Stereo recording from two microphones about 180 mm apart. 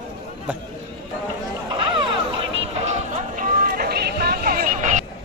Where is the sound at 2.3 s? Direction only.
35° right (ahead or behind).